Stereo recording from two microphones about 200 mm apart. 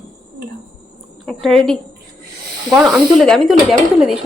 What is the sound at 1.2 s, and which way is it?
Speech, centre (ahead or behind).